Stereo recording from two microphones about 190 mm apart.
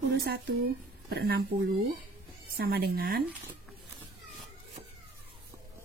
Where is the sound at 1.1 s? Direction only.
55° right (ahead or behind).